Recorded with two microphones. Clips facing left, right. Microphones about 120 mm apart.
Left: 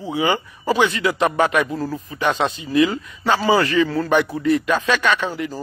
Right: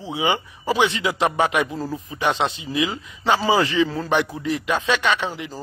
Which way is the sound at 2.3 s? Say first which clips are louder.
Left 2 dB; 25° right (ahead or behind).